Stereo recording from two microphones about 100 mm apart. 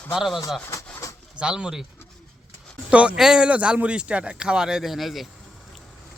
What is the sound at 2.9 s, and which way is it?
Speech, 10° right (ahead or behind).